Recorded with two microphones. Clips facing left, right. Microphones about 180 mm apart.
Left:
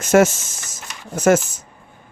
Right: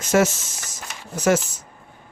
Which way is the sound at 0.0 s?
50° left (ahead or behind).